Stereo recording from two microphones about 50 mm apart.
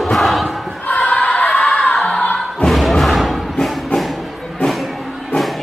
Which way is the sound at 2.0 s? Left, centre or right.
Centre.